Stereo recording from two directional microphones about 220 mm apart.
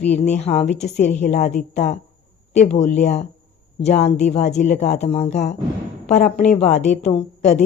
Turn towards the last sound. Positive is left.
turn(degrees=30)  # may be behind; listen again after turning